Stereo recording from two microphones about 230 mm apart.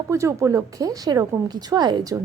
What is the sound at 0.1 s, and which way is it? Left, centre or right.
A woman's voice, centre.